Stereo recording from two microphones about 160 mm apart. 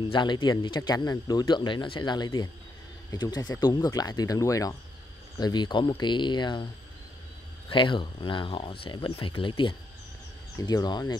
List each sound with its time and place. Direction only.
0.0 s speech: 30° left (ahead or behind)
7.7 s speech: 30° left (ahead or behind)